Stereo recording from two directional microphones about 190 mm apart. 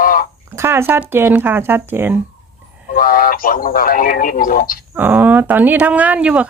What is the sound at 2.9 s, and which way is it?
Speech, 50° left (ahead or behind).